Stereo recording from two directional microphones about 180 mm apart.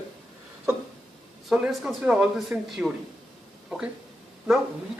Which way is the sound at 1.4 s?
Centre (ahead or behind).